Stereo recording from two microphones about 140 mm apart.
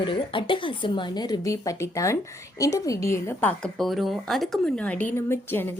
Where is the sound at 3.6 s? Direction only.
Centre (ahead or behind).